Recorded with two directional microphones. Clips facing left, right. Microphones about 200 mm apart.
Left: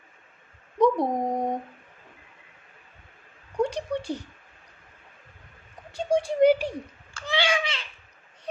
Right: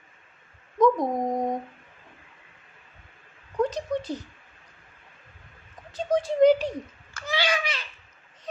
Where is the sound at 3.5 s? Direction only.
10° left (ahead or behind).